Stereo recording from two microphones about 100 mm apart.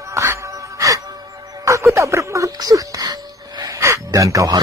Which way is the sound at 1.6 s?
30° right (ahead or behind).